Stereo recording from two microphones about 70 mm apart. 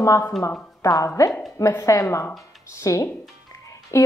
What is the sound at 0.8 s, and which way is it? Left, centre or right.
A woman's voice, left.